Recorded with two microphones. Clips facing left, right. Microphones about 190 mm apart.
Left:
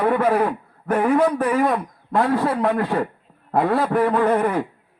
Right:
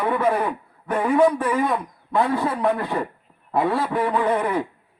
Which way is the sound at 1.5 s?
55° left (ahead or behind).